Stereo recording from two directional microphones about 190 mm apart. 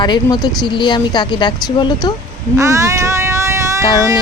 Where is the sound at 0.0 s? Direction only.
20° left (ahead or behind).